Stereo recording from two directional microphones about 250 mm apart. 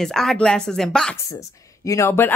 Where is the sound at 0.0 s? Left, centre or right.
Centre.